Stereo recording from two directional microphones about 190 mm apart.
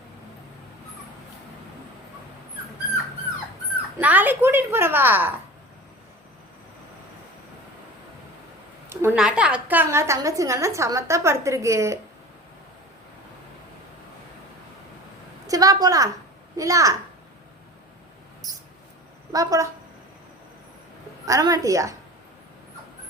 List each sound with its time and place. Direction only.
3.9 s a woman's voice: 10° right (ahead or behind)
8.9 s a woman's voice: 10° right (ahead or behind)
15.4 s a woman's voice: 20° right (ahead or behind)
19.3 s a woman's voice: 20° right (ahead or behind)
21.2 s a woman's voice: 20° right (ahead or behind)